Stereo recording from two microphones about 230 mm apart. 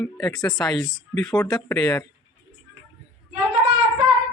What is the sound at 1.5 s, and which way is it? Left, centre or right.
Speech, centre.